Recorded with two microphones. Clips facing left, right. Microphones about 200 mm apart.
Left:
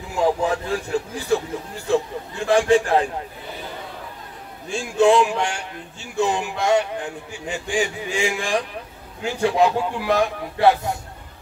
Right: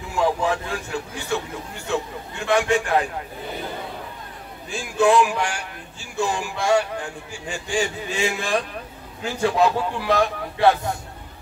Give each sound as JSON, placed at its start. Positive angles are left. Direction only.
{"t": 0.2, "sound": "a man's voice", "side_deg": 35}
{"t": 4.6, "sound": "a man's voice", "side_deg": 25}